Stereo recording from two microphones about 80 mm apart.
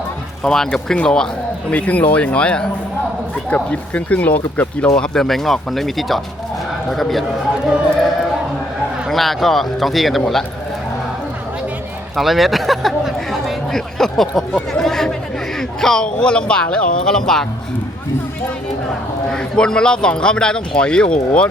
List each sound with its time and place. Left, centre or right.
0.4 s a man's voice: centre
4.9 s speech: centre
9.0 s speech: centre
12.1 s a man's voice: centre
19.3 s a man's voice: centre